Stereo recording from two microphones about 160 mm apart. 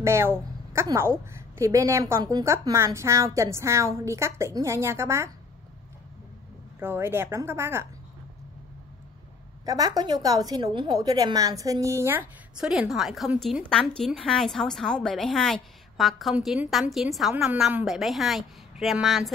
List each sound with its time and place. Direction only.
0.0 s a woman's voice: 15° right (ahead or behind)
6.8 s a woman's voice: 15° right (ahead or behind)
9.7 s a woman's voice: 25° right (ahead or behind); by 19.3 s centre (ahead or behind)